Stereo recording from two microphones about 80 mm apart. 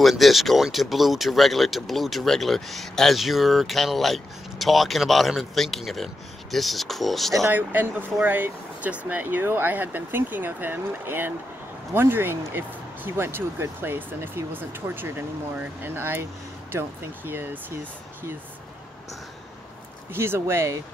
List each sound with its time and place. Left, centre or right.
0.0 s speech: centre
7.5 s speech: right
20.1 s speech: right